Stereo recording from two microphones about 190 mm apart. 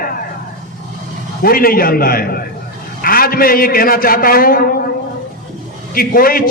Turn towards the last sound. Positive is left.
turn(degrees=50)  # may be behind; listen again after turning